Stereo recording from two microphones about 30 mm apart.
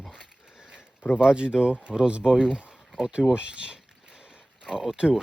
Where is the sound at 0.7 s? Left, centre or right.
Right.